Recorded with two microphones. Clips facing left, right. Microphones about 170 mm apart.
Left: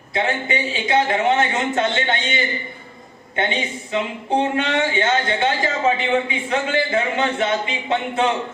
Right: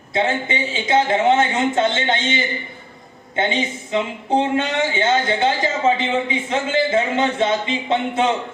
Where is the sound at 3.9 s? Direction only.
25° right (ahead or behind).